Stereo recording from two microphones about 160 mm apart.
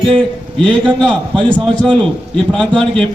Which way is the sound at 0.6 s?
5° left (ahead or behind).